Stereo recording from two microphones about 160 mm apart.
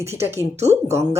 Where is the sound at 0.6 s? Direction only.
40° right (ahead or behind).